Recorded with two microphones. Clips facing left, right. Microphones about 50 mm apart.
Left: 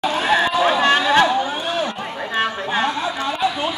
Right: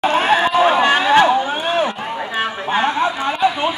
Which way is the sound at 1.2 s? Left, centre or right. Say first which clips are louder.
Right 3 dB; right.